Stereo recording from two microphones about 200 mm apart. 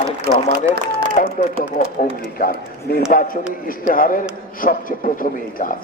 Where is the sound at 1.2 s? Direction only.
40° left (ahead or behind).